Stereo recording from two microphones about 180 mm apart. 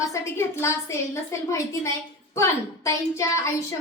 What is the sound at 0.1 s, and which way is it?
A woman's voice, 15° left (ahead or behind).